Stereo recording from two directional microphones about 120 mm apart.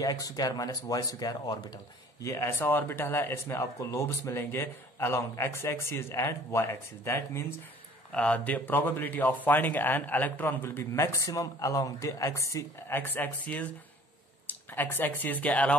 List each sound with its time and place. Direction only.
0.0 s speech: 30° left (ahead or behind)
2.2 s speech: 20° left (ahead or behind)
8.1 s speech: 10° left (ahead or behind)
14.8 s speech: 15° left (ahead or behind)